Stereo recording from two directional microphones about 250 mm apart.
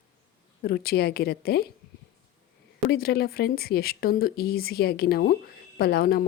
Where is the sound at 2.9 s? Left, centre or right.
Left.